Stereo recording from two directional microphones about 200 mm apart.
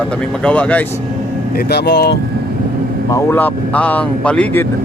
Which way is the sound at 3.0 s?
15° left (ahead or behind).